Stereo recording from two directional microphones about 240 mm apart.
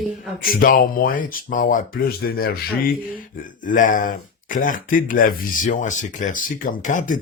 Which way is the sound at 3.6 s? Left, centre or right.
Left.